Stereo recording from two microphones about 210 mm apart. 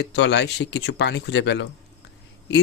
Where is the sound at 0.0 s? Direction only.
55° left (ahead or behind).